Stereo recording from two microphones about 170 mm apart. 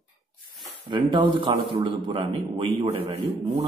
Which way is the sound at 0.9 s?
25° right (ahead or behind).